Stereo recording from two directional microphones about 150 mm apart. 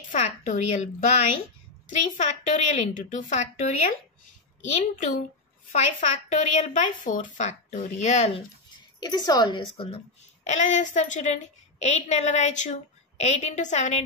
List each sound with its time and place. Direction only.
0.1 s a woman's voice: 55° left (ahead or behind)
1.9 s a child's voice: 55° left (ahead or behind)
4.9 s a woman's voice: 55° left (ahead or behind)
9.0 s a child's voice: 25° left (ahead or behind); by 14.0 s 50° left (ahead or behind)